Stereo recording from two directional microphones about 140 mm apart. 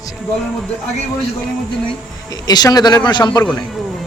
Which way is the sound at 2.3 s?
30° left (ahead or behind).